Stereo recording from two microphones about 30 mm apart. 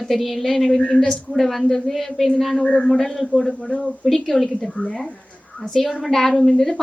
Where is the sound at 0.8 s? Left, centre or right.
Left.